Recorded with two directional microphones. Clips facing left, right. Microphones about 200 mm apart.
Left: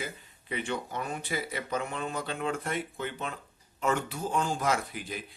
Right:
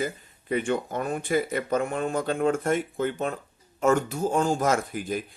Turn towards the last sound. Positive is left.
turn(degrees=-45)  # may be behind; listen again after turning